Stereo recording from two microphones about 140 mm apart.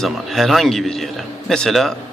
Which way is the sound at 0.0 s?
Centre (ahead or behind).